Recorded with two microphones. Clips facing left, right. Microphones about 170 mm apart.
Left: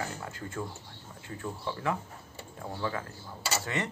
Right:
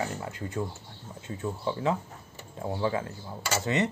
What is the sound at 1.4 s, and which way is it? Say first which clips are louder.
Speech: right 5 dB; 20° right (ahead or behind).